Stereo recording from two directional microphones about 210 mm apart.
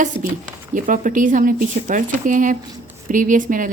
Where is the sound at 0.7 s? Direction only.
40° right (ahead or behind).